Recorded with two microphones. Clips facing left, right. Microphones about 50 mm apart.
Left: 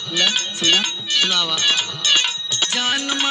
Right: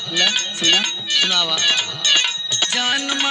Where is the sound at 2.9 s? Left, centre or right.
Right.